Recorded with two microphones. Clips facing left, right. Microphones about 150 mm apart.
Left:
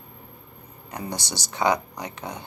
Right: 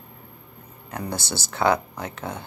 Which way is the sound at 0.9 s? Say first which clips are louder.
Right 2 dB; 15° left (ahead or behind).